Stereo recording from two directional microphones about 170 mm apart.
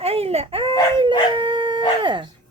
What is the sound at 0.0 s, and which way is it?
Baby cry, 35° right (ahead or behind).